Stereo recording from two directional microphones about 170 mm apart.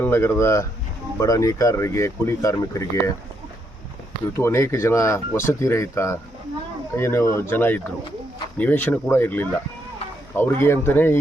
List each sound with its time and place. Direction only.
0.0 s speech: 15° left (ahead or behind)
4.4 s speech: 15° left (ahead or behind)